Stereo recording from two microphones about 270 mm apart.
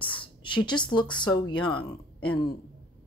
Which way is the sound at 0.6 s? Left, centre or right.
Centre.